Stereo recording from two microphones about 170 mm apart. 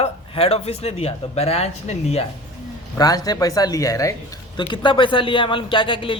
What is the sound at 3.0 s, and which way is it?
Speech, 20° left (ahead or behind).